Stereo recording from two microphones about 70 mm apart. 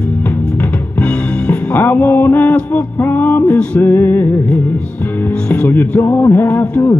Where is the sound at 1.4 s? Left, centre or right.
Left.